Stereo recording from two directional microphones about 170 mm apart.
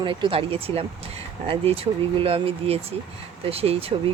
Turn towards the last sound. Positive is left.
turn(degrees=-35)  # may be behind; listen again after turning